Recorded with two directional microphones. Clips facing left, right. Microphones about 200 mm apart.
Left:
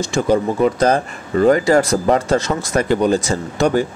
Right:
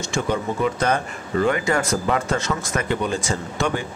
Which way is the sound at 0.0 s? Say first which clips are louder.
Left 7 dB; 35° left (ahead or behind).